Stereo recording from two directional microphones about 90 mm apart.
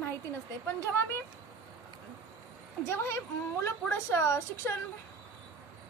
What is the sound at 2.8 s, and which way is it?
A woman's voice, 25° left (ahead or behind).